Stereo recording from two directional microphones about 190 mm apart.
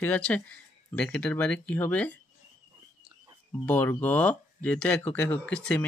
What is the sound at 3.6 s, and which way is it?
Speech, 10° left (ahead or behind).